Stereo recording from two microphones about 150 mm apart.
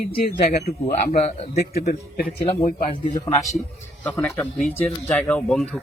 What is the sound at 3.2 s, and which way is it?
Speech, 20° left (ahead or behind).